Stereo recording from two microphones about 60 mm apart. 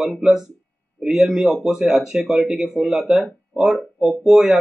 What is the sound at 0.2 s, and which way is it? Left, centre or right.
A man's voice, centre.